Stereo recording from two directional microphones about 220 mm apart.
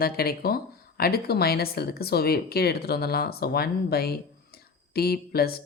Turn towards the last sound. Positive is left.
turn(degrees=45)  # may be behind; listen again after turning